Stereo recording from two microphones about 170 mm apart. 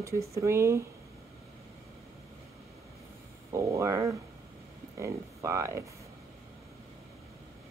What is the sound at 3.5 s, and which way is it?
A woman's voice, 20° right (ahead or behind).